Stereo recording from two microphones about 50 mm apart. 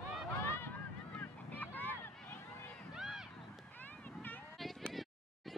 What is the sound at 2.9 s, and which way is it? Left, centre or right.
Run, centre.